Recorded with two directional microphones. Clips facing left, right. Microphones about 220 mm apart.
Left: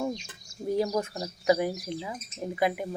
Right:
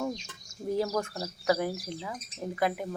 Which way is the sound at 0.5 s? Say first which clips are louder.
Left 3 dB; 45° right (ahead or behind).